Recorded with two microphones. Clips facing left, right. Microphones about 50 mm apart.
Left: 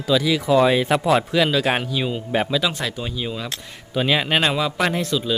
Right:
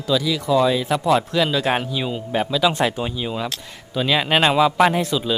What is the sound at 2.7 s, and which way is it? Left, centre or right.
Speech, right.